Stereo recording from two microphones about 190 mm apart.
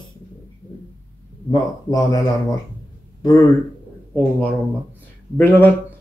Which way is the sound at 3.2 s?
20° left (ahead or behind).